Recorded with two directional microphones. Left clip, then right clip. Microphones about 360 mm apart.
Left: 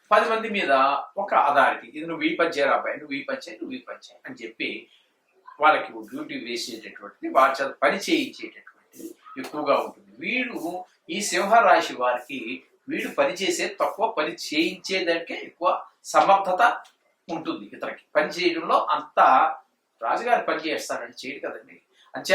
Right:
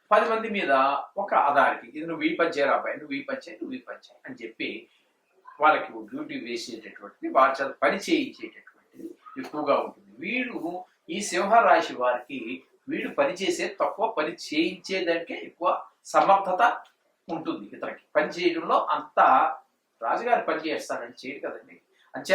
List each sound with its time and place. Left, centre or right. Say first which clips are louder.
0.1 s speech: left 2 dB; centre
10.6 s speech: left 2 dB; right
11.0 s speech: left 2 dB; centre